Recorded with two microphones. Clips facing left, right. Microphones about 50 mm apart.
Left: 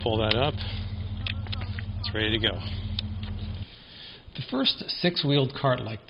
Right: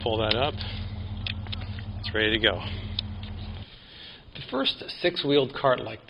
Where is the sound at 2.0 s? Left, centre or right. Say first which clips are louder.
Right 4 dB; centre.